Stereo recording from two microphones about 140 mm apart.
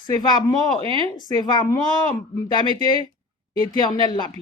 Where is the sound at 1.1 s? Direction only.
30° left (ahead or behind).